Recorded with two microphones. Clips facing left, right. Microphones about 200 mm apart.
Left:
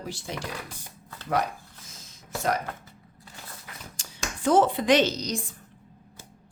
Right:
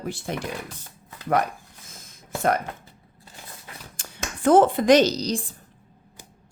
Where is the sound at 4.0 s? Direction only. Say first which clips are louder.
Right 4 dB; 55° right (ahead or behind).